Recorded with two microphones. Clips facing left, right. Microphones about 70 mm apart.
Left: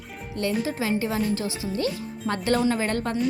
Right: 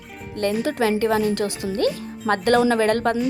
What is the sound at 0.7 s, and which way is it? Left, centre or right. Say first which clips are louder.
Speech: right 6 dB; right.